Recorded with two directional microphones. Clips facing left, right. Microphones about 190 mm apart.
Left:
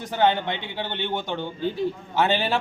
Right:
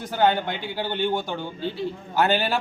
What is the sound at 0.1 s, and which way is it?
A woman's voice, 5° right (ahead or behind).